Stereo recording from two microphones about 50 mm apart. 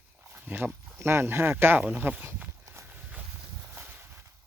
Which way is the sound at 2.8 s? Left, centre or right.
Right.